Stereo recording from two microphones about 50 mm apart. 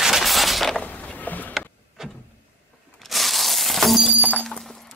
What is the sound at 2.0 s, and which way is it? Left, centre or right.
Vehicle, centre.